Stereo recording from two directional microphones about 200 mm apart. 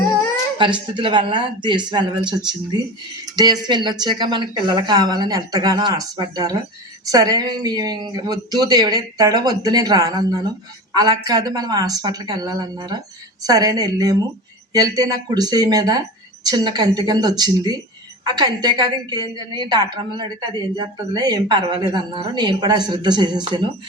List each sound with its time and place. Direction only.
0.6 s a woman's voice: 25° right (ahead or behind)